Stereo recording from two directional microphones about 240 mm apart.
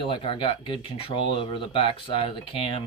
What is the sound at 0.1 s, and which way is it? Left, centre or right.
Speech, left.